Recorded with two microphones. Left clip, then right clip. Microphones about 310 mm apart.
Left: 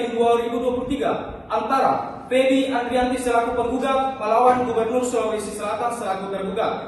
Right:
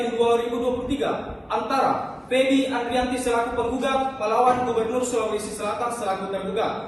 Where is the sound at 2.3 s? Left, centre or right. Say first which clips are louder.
Left 2 dB; centre.